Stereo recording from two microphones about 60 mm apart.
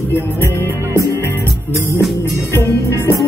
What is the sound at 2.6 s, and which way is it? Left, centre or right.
Music, left.